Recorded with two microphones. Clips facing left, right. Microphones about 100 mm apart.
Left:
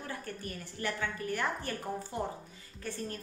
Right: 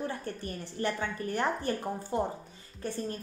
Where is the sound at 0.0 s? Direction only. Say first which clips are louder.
Right 5 dB; 30° right (ahead or behind).